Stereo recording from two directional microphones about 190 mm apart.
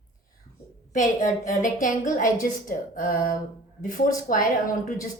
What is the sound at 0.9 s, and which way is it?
A woman's voice, 40° left (ahead or behind).